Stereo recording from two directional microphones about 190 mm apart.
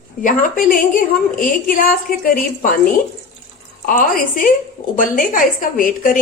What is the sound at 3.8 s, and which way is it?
A woman's voice, 45° left (ahead or behind).